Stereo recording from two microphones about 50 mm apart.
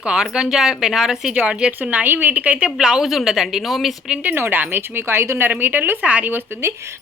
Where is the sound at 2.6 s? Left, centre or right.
Centre.